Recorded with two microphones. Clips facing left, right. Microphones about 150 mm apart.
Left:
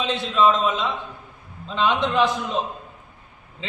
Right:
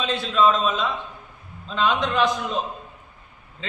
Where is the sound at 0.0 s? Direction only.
25° left (ahead or behind).